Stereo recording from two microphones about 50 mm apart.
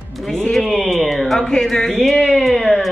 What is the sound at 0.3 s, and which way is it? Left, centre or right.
Speech, centre.